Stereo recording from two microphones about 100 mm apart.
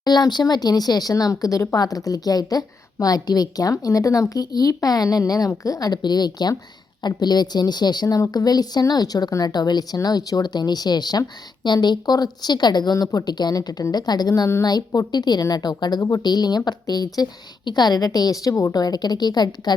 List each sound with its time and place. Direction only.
0.0 s a woman's voice: 45° left (ahead or behind)